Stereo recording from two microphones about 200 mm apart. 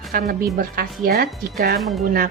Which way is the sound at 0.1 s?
45° right (ahead or behind).